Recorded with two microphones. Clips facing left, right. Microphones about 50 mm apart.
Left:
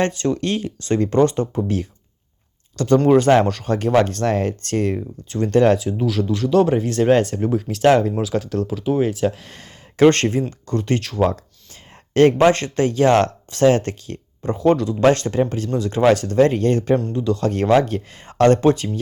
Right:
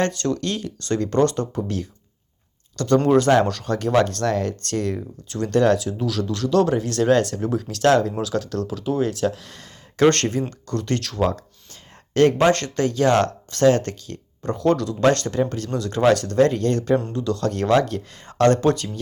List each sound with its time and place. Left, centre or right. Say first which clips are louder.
0.0 s speech: left 2 dB; left
3.1 s speech: left 3 dB; left